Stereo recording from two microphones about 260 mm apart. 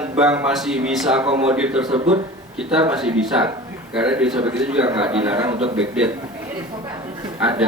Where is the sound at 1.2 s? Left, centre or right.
Right.